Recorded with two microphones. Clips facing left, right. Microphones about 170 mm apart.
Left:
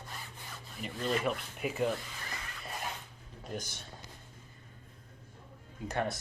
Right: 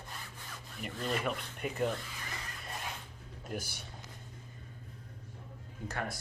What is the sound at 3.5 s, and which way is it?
Speech, 10° right (ahead or behind).